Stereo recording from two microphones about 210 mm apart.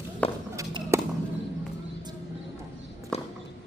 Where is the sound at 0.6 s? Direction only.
15° right (ahead or behind).